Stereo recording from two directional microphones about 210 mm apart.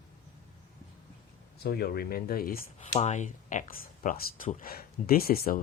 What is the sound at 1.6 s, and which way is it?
Speech, 50° left (ahead or behind).